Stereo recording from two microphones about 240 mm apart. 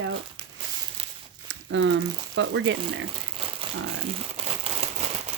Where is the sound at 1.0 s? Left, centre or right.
Right.